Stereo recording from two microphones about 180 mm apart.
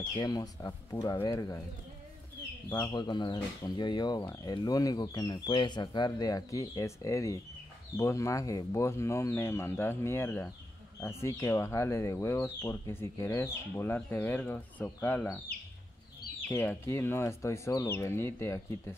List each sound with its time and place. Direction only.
0.2 s speech: 20° left (ahead or behind)
2.7 s speech: 20° left (ahead or behind)